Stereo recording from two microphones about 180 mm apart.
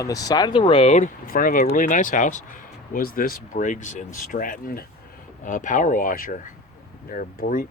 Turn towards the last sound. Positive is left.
turn(degrees=50)  # may be behind; listen again after turning